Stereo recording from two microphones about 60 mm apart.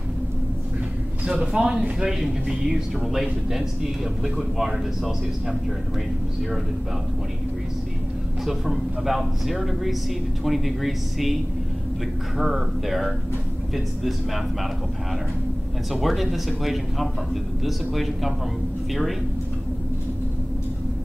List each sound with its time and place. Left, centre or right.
1.2 s speech: centre
8.5 s speech: centre
12.4 s speech: centre
15.9 s speech: centre